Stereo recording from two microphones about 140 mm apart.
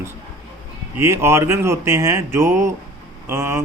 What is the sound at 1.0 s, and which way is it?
Speech, 20° right (ahead or behind).